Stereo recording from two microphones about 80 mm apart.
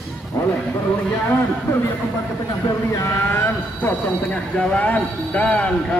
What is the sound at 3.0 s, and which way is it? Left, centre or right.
Speech, left.